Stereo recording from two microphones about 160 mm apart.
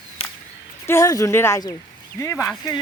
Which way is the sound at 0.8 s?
20° left (ahead or behind).